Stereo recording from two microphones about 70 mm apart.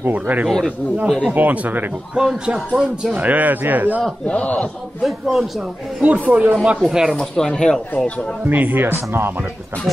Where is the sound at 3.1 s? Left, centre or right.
Right.